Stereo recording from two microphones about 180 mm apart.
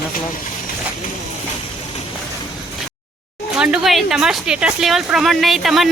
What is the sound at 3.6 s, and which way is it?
Speech, 5° right (ahead or behind).